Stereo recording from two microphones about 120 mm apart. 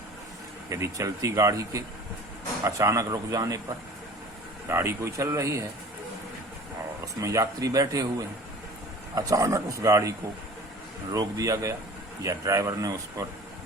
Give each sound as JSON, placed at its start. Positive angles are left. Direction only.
{"t": 0.7, "sound": "speech", "side_deg": -25}
{"t": 4.7, "sound": "speech", "side_deg": -20}
{"t": 7.0, "sound": "speech", "side_deg": -25}